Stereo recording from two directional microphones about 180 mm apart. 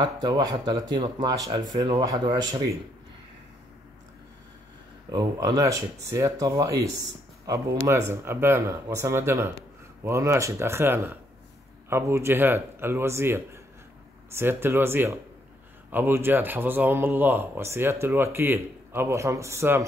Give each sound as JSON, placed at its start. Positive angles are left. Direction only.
{"t": 0.0, "sound": "speech", "side_deg": -20}
{"t": 5.1, "sound": "speech", "side_deg": -20}